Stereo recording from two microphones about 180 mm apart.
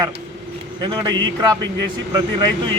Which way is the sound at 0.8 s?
25° right (ahead or behind).